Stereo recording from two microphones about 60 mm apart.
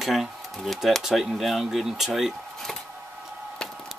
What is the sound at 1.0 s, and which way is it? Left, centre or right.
Speech, centre.